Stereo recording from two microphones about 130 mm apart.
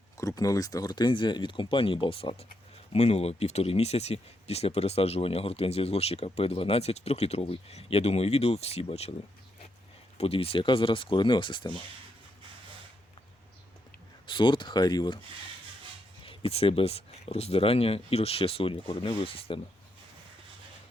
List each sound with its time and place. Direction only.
0.2 s speech: 25° left (ahead or behind); by 9.1 s 50° left (ahead or behind)
10.2 s speech: 50° left (ahead or behind)
14.3 s speech: 40° left (ahead or behind)
16.2 s speech: 45° left (ahead or behind)